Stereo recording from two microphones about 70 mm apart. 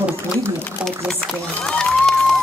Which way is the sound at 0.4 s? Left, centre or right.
Centre.